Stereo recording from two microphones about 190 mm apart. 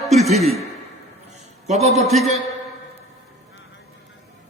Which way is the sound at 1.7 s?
35° right (ahead or behind).